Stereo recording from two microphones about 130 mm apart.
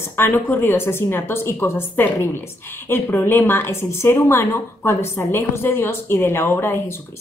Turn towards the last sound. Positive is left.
turn(degrees=20)  # may be behind; listen again after turning